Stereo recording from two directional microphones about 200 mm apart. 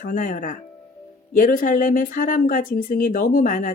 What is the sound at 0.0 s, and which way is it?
Speech, 45° left (ahead or behind).